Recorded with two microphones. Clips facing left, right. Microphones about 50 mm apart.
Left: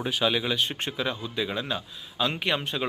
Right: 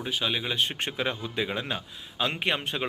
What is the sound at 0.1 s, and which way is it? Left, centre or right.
Speech, centre.